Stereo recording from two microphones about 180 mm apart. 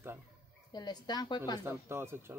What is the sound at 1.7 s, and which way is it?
Speech, 15° right (ahead or behind).